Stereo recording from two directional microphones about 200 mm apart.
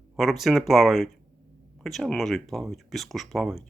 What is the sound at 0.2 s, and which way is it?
Speech, centre (ahead or behind).